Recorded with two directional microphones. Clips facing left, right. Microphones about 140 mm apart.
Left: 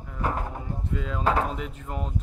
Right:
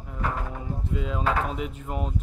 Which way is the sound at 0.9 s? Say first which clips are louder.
Left 1 dB; 10° right (ahead or behind).